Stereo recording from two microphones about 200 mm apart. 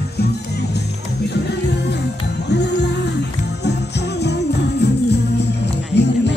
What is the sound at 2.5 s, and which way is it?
Music, 60° left (ahead or behind).